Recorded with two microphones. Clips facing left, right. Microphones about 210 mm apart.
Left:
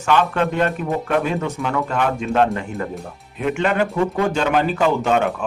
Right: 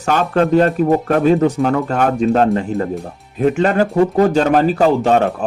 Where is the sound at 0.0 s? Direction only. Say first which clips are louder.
Right 3 dB; 40° right (ahead or behind).